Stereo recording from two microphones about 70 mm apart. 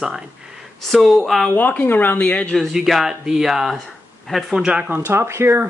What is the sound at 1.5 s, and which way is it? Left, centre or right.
Speech, left.